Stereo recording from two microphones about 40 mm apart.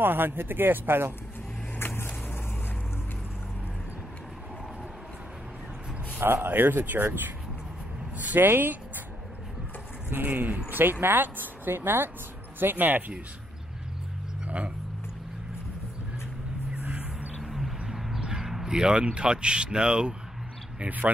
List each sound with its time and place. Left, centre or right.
0.0 s speech: right
1.8 s vehicle: left
6.1 s speech: right
8.4 s speech: right
10.0 s speech: right
10.7 s speech: right
12.5 s speech: right
14.4 s vehicle: right
16.8 s music: right
17.4 s a sound: centre
18.2 s a sound: centre
18.7 s speech: right